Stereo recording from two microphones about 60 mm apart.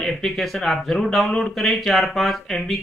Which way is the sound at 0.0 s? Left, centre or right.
Centre.